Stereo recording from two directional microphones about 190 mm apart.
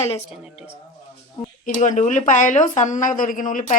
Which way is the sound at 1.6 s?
40° left (ahead or behind).